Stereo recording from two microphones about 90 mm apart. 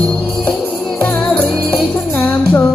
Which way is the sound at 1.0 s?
15° left (ahead or behind).